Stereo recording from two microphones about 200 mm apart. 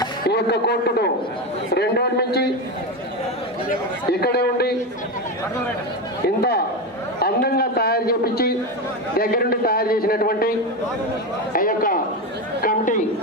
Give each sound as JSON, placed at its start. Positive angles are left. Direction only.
{"t": 0.3, "sound": "speech", "side_deg": 55}
{"t": 4.1, "sound": "a man's voice", "side_deg": 55}
{"t": 6.2, "sound": "a man's voice", "side_deg": 55}
{"t": 11.5, "sound": "a man's voice", "side_deg": 45}